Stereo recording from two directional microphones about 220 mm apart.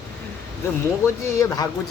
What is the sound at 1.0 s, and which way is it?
Speech, 15° left (ahead or behind).